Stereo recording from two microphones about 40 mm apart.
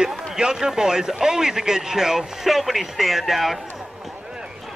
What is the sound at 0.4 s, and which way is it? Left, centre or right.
Speech, centre.